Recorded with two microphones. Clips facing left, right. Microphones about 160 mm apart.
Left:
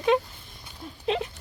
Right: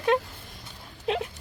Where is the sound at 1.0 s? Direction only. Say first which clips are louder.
Left 1 dB; 5° right (ahead or behind).